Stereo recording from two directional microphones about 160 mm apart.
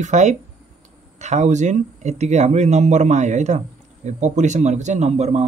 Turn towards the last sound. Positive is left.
turn(degrees=-45)  # may be behind; listen again after turning